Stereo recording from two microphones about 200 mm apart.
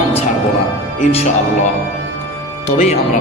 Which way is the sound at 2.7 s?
35° left (ahead or behind).